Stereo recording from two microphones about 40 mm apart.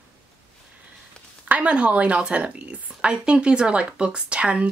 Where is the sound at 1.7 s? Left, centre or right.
Right.